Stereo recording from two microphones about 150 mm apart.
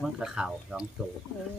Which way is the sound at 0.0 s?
5° right (ahead or behind).